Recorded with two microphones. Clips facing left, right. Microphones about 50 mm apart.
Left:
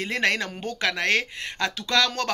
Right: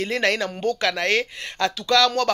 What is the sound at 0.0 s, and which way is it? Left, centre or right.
Speech, left.